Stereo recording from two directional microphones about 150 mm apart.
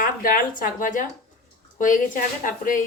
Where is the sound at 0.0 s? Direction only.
70° left (ahead or behind).